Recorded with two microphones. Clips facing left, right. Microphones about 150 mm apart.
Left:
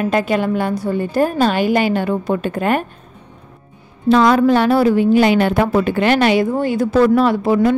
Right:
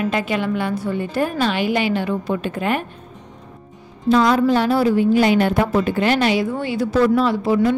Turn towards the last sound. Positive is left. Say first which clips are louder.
# left 3 dB
turn(degrees=55)  # may be behind; listen again after turning